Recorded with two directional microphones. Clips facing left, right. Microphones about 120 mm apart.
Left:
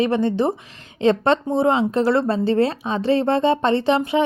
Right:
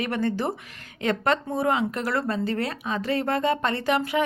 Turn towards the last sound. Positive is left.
turn(degrees=25)  # may be behind; listen again after turning